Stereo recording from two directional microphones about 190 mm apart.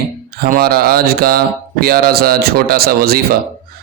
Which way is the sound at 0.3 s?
50° right (ahead or behind).